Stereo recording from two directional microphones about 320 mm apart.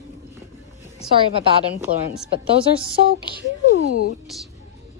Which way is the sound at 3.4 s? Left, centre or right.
Left.